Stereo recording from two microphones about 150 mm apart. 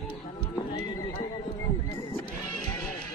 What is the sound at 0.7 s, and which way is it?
Horse, 25° left (ahead or behind).